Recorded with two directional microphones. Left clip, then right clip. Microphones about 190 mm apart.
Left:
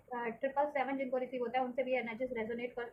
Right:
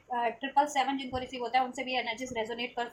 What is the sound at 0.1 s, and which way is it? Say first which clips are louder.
A woman's voice: right 7 dB; 35° right (ahead or behind).